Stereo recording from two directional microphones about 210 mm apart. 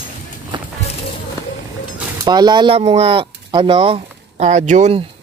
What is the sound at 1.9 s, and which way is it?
Speech, 20° right (ahead or behind).